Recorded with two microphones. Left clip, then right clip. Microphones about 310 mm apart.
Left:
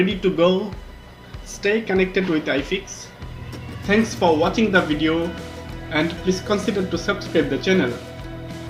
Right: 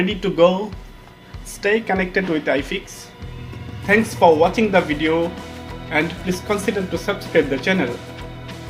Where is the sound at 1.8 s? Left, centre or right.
Right.